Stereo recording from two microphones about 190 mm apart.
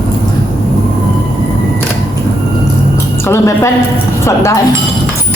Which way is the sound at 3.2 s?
15° left (ahead or behind).